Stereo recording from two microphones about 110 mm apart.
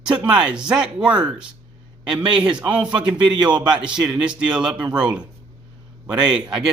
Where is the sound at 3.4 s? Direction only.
40° right (ahead or behind).